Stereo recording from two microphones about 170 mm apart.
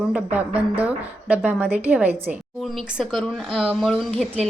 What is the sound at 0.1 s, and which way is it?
A woman's voice, 10° right (ahead or behind).